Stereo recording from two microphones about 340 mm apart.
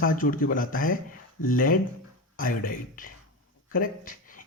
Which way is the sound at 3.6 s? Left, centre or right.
Left.